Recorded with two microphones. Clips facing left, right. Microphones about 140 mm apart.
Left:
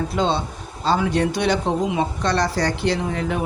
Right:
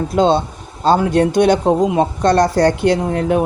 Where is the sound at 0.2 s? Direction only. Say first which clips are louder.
Right 9 dB; 50° right (ahead or behind).